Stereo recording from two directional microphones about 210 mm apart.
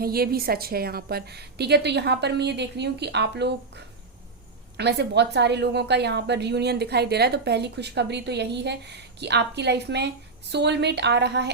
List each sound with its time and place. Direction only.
0.0 s a woman's voice: 45° right (ahead or behind)